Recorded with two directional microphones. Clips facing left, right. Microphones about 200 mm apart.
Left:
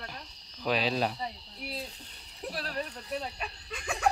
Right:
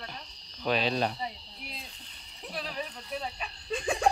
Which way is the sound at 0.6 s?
5° left (ahead or behind).